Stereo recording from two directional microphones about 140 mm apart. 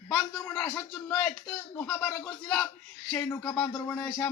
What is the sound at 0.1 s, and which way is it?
Speech, 5° left (ahead or behind).